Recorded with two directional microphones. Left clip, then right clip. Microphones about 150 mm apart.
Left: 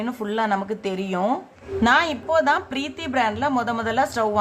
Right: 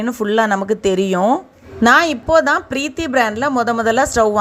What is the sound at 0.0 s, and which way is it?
A woman's voice, 35° right (ahead or behind).